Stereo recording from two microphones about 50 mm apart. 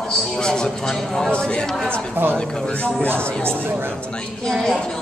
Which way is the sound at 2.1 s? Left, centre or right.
Right.